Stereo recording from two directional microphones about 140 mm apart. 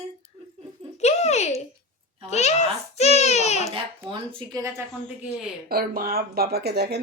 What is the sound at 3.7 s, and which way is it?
Speech, 35° right (ahead or behind).